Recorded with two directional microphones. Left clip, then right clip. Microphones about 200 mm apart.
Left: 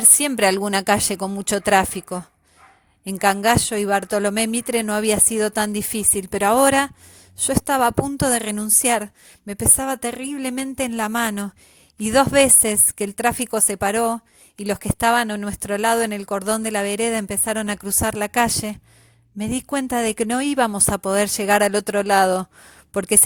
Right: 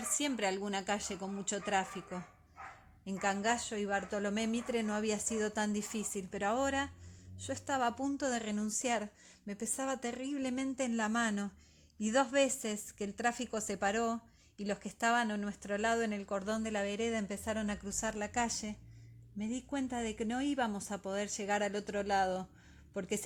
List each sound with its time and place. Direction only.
0.2 s a woman's voice: 60° left (ahead or behind)